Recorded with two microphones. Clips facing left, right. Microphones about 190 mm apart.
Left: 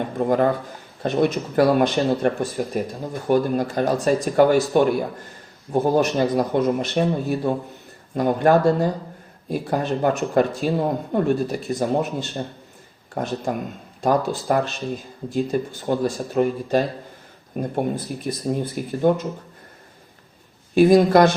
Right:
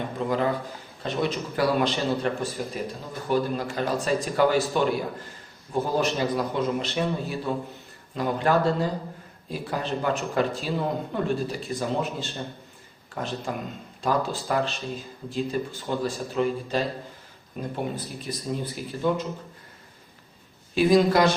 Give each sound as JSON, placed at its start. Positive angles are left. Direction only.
{"t": 0.2, "sound": "speech", "side_deg": 50}
{"t": 13.1, "sound": "speech", "side_deg": 45}
{"t": 20.7, "sound": "speech", "side_deg": 50}